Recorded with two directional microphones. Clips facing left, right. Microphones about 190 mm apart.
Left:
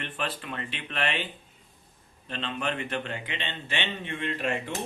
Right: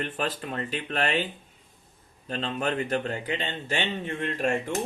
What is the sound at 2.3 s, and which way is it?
A man's voice, 40° right (ahead or behind).